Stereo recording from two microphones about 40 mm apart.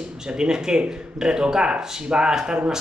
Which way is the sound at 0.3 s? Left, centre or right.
Centre.